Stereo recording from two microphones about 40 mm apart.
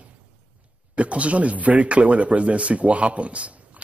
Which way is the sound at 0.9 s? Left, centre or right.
Right.